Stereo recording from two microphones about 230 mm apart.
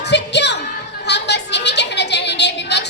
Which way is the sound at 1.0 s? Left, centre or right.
Left.